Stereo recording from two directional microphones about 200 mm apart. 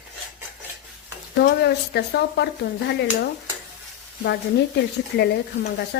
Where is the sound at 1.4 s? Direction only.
55° left (ahead or behind).